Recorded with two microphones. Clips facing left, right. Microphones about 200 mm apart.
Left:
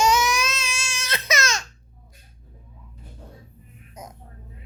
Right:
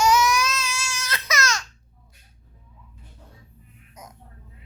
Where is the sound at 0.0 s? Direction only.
25° left (ahead or behind).